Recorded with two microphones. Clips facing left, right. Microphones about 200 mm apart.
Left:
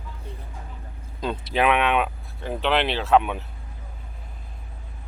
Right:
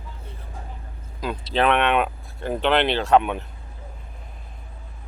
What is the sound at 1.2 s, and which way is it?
Speech, 25° left (ahead or behind).